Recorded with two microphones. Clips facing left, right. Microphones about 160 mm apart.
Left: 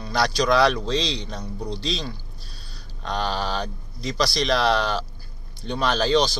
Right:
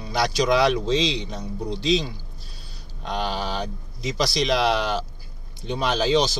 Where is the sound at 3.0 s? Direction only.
10° right (ahead or behind).